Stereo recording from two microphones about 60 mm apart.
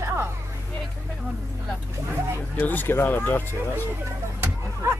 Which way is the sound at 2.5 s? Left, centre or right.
Left.